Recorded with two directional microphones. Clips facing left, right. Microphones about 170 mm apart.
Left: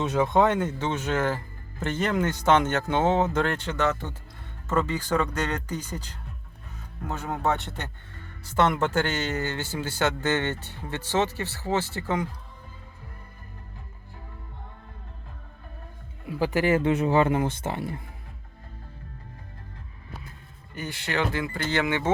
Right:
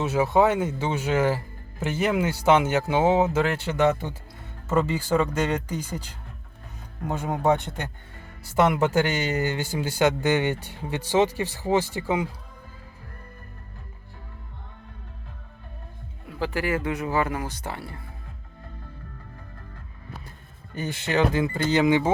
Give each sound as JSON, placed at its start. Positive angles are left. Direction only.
{"t": 0.0, "sound": "speech", "side_deg": -5}
{"t": 16.4, "sound": "speech", "side_deg": 20}
{"t": 20.7, "sound": "speech", "side_deg": -20}